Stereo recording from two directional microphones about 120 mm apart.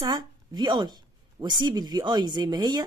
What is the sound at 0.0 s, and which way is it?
A woman's voice, 35° right (ahead or behind).